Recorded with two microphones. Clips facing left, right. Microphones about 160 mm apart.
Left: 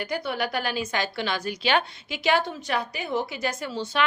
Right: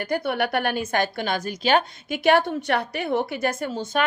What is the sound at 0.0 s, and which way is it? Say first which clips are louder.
A woman's voice: right 4 dB; 55° right (ahead or behind).